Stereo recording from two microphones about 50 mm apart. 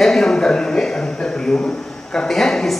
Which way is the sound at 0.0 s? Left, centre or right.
Centre.